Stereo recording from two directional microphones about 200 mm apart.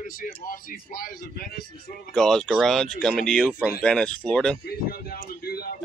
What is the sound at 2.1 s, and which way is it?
Speech, 5° left (ahead or behind).